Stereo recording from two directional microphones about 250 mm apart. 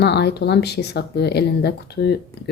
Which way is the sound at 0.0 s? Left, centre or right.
Left.